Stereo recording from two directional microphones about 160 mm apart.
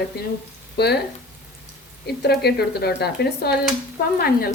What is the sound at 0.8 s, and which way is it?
Speech, 90° left.